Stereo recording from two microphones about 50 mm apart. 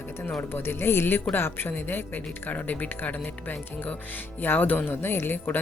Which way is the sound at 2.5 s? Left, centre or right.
Left.